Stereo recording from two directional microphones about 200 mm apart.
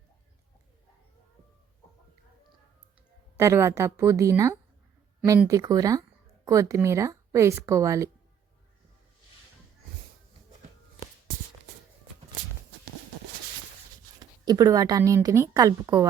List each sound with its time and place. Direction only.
3.3 s a woman's voice: 15° right (ahead or behind)
14.2 s a woman's voice: 20° right (ahead or behind)